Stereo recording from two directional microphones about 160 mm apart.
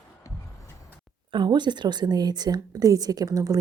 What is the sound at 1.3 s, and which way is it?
A woman's voice, 30° right (ahead or behind).